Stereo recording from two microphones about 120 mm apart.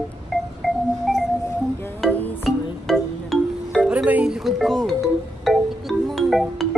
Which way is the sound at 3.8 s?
10° right (ahead or behind).